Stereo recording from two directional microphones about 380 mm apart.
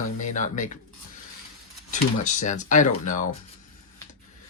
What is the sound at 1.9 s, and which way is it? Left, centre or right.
Speech, centre.